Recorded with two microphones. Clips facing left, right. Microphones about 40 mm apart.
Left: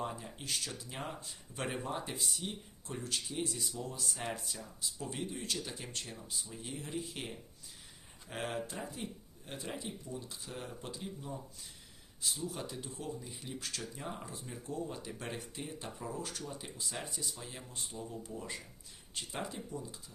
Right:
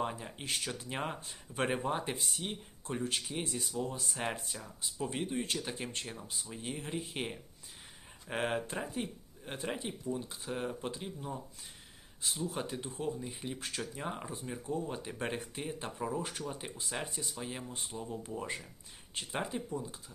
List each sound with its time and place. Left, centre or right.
0.0 s speech: right